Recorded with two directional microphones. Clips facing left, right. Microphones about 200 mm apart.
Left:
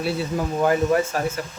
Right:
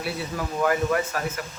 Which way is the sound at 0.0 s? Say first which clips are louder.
Left 5 dB; 25° left (ahead or behind).